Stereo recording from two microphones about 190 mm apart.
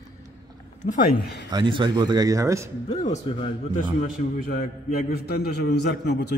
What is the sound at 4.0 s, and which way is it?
Speech, 40° left (ahead or behind).